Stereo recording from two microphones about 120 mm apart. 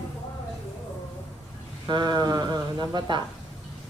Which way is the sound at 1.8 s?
40° right (ahead or behind).